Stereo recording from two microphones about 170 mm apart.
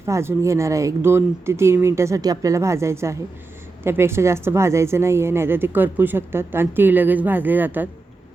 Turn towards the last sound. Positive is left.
turn(degrees=-10)  # may be behind; listen again after turning